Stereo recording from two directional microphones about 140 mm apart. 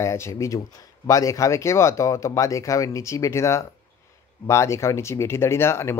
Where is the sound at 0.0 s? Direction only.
20° left (ahead or behind).